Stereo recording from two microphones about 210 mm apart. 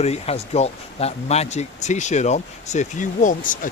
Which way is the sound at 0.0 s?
30° left (ahead or behind).